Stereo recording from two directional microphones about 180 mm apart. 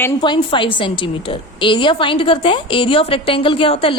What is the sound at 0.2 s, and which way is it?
A woman's voice, 25° left (ahead or behind).